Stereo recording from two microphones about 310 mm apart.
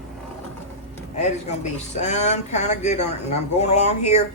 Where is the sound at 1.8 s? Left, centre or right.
Left.